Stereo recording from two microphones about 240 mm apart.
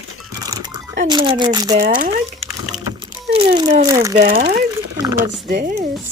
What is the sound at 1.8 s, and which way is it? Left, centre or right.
Speech, right.